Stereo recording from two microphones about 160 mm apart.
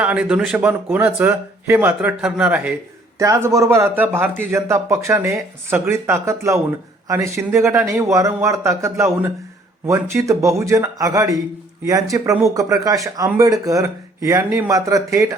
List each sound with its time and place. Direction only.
0.0 s speech: 10° right (ahead or behind)
3.2 s speech: 20° right (ahead or behind)